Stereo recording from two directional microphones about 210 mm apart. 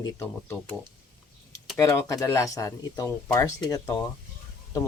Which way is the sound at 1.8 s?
15° left (ahead or behind).